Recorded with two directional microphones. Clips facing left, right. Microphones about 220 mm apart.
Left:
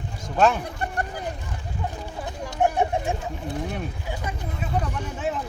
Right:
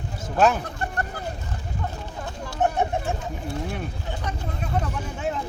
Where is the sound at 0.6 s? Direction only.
15° left (ahead or behind).